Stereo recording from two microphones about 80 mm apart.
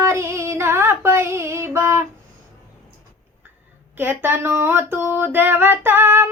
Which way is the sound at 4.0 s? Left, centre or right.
Right.